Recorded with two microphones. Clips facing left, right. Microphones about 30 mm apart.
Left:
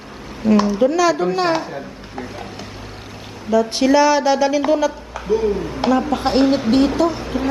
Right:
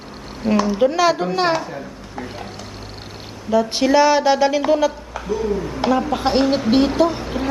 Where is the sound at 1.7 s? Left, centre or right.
Centre.